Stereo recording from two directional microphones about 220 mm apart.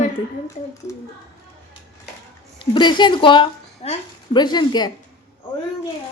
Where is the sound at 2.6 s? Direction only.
20° left (ahead or behind).